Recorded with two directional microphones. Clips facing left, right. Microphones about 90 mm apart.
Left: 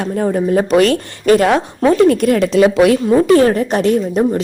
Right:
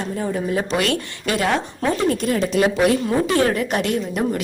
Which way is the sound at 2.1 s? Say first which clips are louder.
Left 8 dB; 60° left (ahead or behind).